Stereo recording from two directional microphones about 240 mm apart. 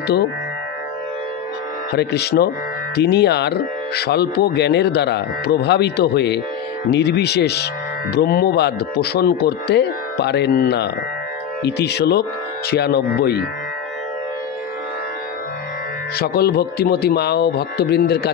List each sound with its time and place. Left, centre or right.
2.0 s speech: left
16.2 s speech: left